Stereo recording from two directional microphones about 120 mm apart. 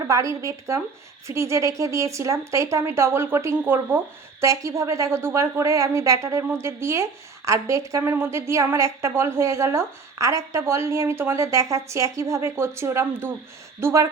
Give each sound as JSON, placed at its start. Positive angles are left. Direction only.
{"t": 0.1, "sound": "speech", "side_deg": -25}